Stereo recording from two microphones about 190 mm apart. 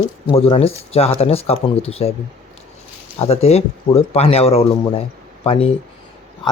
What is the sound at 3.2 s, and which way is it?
Speech, 35° left (ahead or behind).